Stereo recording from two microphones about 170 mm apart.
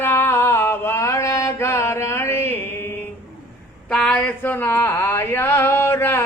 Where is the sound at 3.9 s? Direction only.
5° left (ahead or behind).